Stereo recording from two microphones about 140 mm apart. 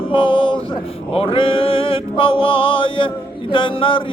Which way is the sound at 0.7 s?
40° left (ahead or behind).